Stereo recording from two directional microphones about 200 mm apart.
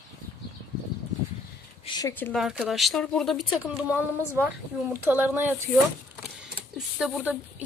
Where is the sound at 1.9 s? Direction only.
20° left (ahead or behind).